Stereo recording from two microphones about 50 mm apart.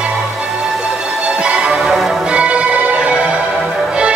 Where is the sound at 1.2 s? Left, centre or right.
Right.